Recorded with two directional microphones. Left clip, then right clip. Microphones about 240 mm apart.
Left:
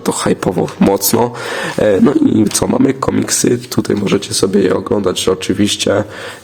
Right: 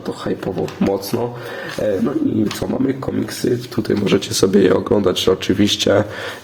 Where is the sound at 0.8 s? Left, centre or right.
Left.